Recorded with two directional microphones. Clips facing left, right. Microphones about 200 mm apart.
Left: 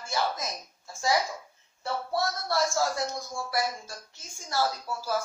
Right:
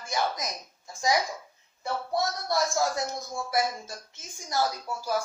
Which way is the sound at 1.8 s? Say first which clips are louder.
Right 1 dB; 15° right (ahead or behind).